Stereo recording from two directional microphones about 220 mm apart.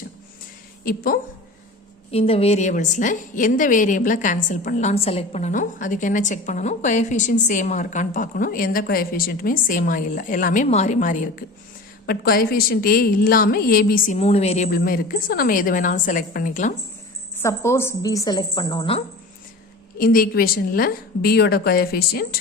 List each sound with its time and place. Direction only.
0.9 s a woman's voice: 40° left (ahead or behind)
2.0 s a woman's voice: 25° left (ahead or behind)
14.2 s a woman's voice: 30° left (ahead or behind)
17.3 s a woman's voice: 10° left (ahead or behind)
20.0 s a woman's voice: 40° left (ahead or behind)